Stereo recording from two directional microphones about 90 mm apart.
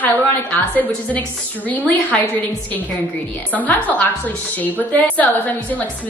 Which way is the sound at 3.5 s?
15° left (ahead or behind).